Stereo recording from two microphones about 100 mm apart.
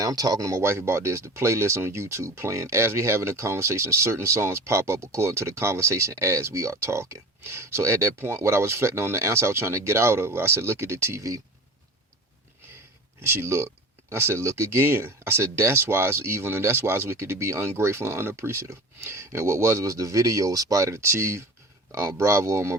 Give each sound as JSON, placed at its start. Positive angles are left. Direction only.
{"t": 0.0, "sound": "speech", "side_deg": -35}
{"t": 13.2, "sound": "speech", "side_deg": -25}